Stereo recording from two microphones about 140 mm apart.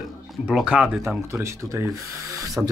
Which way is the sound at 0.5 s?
5° right (ahead or behind).